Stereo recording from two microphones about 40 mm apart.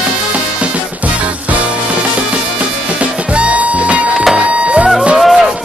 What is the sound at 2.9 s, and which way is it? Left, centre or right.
Music, right.